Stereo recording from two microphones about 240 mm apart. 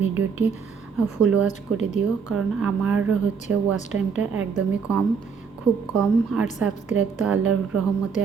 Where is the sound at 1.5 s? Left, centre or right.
Left.